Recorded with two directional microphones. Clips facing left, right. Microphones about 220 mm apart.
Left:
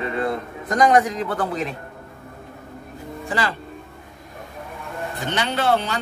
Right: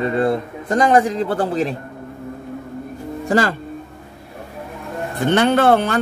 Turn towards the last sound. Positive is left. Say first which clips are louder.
# right 7 dB
turn(degrees=-55)  # may be behind; listen again after turning